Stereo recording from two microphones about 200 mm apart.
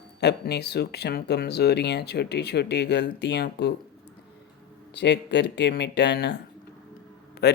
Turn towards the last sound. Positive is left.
turn(degrees=50)  # may be behind; listen again after turning